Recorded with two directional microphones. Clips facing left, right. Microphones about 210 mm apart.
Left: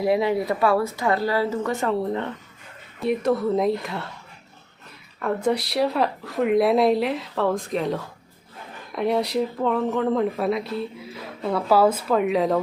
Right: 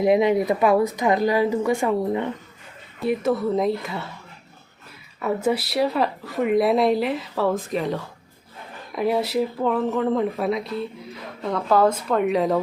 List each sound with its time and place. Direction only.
0.0 s speech: 20° right (ahead or behind)
3.0 s speech: centre (ahead or behind)
5.2 s speech: 5° right (ahead or behind)